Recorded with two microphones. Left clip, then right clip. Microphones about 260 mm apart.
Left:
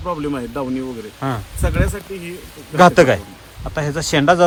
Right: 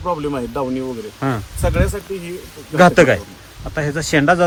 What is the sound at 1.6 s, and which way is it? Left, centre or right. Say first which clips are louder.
Speech: right 3 dB; centre.